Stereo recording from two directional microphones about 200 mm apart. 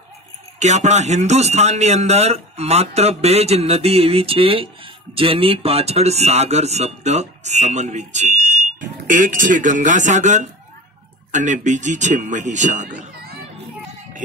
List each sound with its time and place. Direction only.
0.6 s a man's voice: 35° right (ahead or behind)